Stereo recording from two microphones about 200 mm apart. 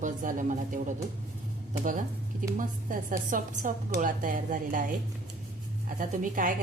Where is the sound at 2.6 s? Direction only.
40° right (ahead or behind).